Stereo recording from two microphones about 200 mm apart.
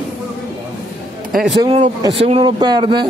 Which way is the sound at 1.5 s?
25° right (ahead or behind).